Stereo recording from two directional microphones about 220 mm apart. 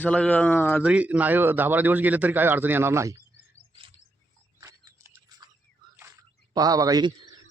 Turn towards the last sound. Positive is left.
turn(degrees=-15)  # may be behind; listen again after turning